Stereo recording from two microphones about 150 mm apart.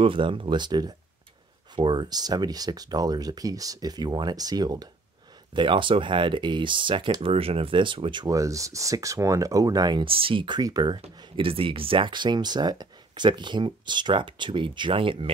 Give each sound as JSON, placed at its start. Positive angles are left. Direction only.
{"t": 0.0, "sound": "speech", "side_deg": -35}